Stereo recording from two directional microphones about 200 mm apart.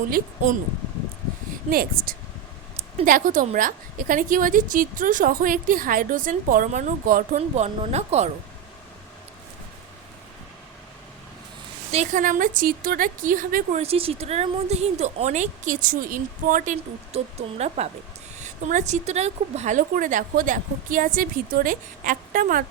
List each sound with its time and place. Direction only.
1.7 s a woman's voice: 45° right (ahead or behind)
11.9 s a woman's voice: 35° right (ahead or behind)
13.8 s a woman's voice: 30° right (ahead or behind); by 22.6 s 45° right (ahead or behind)